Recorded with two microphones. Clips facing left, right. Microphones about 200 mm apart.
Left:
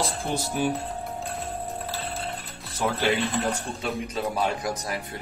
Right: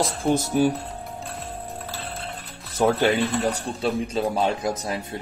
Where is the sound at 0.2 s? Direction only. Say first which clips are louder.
Right 7 dB; 45° right (ahead or behind).